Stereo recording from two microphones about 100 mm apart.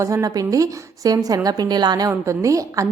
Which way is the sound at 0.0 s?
35° right (ahead or behind).